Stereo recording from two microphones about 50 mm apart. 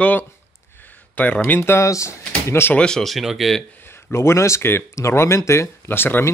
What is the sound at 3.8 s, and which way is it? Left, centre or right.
Speech, left.